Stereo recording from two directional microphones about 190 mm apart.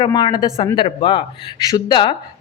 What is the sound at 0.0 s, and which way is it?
A woman's voice, 25° left (ahead or behind).